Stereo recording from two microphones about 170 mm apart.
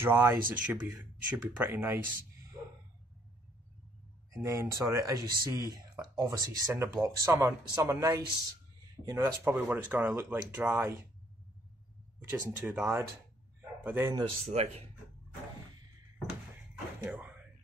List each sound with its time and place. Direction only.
0.0 s speech: 15° right (ahead or behind)
4.3 s speech: 20° right (ahead or behind)
12.2 s speech: 10° right (ahead or behind)
13.6 s a sound: 10° right (ahead or behind)
14.2 s speech: 40° right (ahead or behind)
17.0 s speech: 10° right (ahead or behind)